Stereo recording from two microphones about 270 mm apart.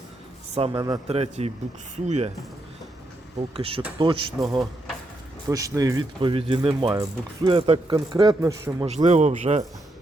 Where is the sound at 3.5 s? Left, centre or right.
Right.